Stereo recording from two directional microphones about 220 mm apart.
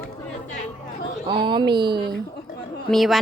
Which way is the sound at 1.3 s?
20° right (ahead or behind).